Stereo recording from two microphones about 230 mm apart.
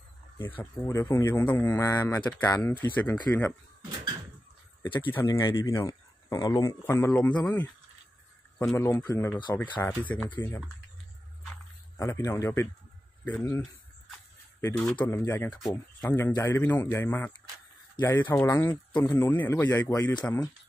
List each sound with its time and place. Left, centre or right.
0.6 s speech: centre
4.8 s speech: left
12.0 s speech: centre
14.9 s speech: centre